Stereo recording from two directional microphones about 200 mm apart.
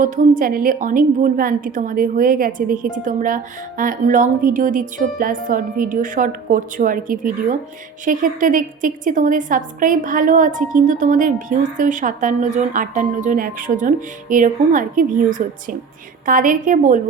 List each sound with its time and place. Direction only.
0.0 s a woman's voice: 45° right (ahead or behind)